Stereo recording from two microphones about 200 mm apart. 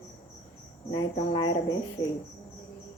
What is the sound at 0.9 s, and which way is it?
Speech, 25° left (ahead or behind).